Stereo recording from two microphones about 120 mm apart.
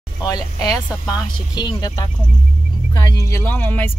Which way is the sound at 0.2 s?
35° left (ahead or behind).